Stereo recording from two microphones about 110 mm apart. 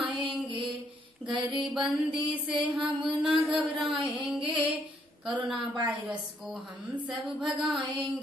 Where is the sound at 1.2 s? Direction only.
45° right (ahead or behind).